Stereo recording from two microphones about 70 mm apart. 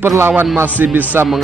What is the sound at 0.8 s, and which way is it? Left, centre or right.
Speech, right.